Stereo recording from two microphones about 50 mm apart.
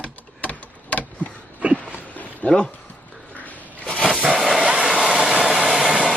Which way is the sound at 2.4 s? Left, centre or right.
Centre.